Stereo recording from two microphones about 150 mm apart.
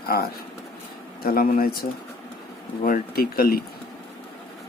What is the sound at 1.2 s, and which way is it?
Speech, 75° left (ahead or behind).